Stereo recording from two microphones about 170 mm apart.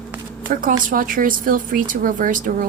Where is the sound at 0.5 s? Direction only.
50° right (ahead or behind).